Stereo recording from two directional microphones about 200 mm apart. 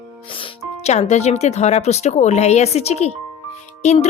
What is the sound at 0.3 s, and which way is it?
Speech, 30° left (ahead or behind).